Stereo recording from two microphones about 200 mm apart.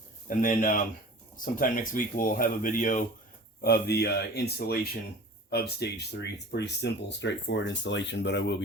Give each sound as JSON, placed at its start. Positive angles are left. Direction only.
{"t": 0.3, "sound": "speech", "side_deg": 40}
{"t": 3.6, "sound": "speech", "side_deg": 50}